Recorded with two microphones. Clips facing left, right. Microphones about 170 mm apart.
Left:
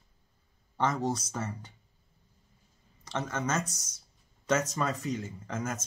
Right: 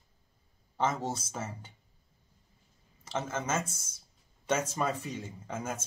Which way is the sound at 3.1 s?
5° right (ahead or behind).